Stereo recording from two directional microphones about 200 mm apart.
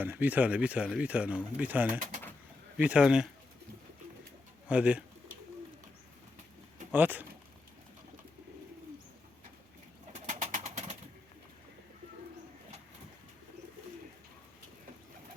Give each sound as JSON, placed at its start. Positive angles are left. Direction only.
{"t": 0.0, "sound": "speech", "side_deg": -10}
{"t": 4.7, "sound": "speech", "side_deg": -5}
{"t": 6.9, "sound": "speech", "side_deg": -10}
{"t": 10.2, "sound": "bird", "side_deg": -35}